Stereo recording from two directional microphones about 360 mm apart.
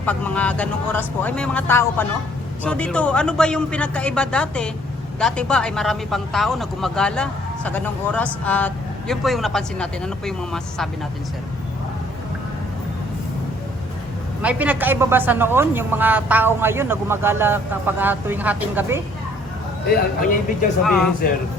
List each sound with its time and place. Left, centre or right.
0.0 s speech: centre
14.4 s speech: centre
19.9 s speech: left
20.8 s speech: centre